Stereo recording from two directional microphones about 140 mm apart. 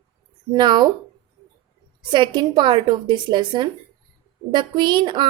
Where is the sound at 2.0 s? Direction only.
35° right (ahead or behind).